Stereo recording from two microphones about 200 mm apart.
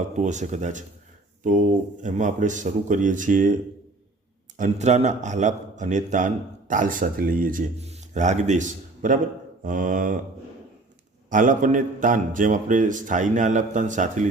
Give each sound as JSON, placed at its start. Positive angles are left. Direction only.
{"t": 0.2, "sound": "a man's voice", "side_deg": -35}
{"t": 4.5, "sound": "a man's voice", "side_deg": -35}
{"t": 11.3, "sound": "a man's voice", "side_deg": -40}